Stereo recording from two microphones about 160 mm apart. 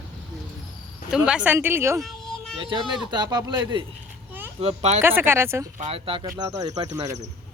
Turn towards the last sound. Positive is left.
turn(degrees=-20)  # may be behind; listen again after turning